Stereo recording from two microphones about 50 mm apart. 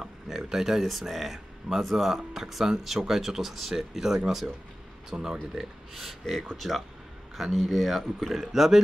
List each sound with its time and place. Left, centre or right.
0.0 s a sound: centre
0.8 s speech: centre
5.5 s speech: centre